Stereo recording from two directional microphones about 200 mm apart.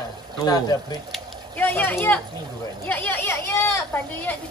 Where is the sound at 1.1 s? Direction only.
10° left (ahead or behind).